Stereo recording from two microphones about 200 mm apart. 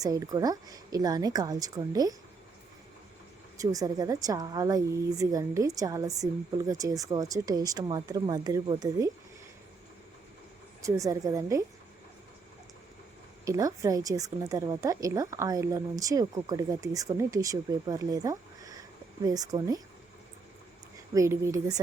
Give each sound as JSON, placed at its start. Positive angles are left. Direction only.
{"t": 0.0, "sound": "a woman's voice", "side_deg": -15}
{"t": 3.6, "sound": "speech", "side_deg": -20}
{"t": 10.8, "sound": "speech", "side_deg": -15}
{"t": 13.4, "sound": "a woman's voice", "side_deg": -15}
{"t": 21.1, "sound": "speech", "side_deg": -15}